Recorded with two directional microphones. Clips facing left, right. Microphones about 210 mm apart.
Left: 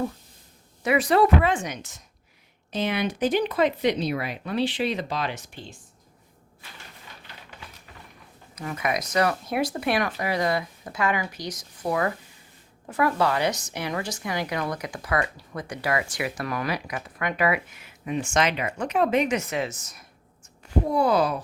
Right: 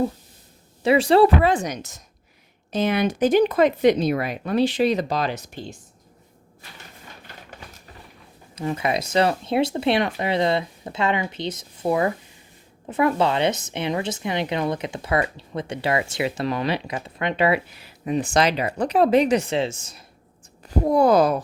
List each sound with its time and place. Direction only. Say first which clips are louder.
0.8 s a woman's voice: right 5 dB; 30° right (ahead or behind)
7.5 s a sound: right 3 dB; 45° right (ahead or behind)
8.5 s a woman's voice: right 4 dB; 30° right (ahead or behind)
20.7 s speech: right 5 dB; 45° right (ahead or behind)